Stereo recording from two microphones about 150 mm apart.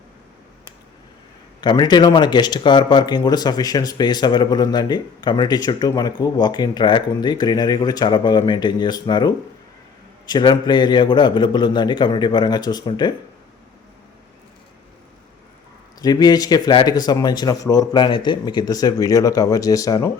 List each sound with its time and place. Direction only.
1.6 s speech: 30° left (ahead or behind)
10.3 s a man's voice: 30° left (ahead or behind)
16.0 s speech: 25° left (ahead or behind)